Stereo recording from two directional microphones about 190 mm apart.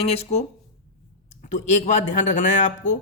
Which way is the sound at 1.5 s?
40° left (ahead or behind).